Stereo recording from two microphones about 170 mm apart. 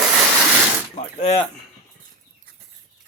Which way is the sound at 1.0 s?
45° left (ahead or behind).